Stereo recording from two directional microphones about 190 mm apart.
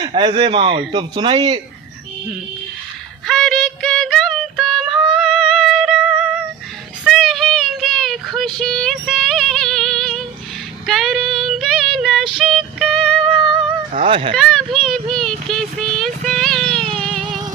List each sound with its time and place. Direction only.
0.0 s speech: 25° right (ahead or behind)
3.2 s music: centre (ahead or behind)
7.0 s child singing: centre (ahead or behind)
12.4 s music: centre (ahead or behind)
14.1 s speech: 25° right (ahead or behind)
14.3 s a sound: centre (ahead or behind)